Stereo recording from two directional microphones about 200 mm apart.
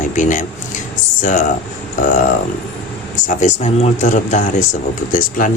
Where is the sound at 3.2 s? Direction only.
35° left (ahead or behind).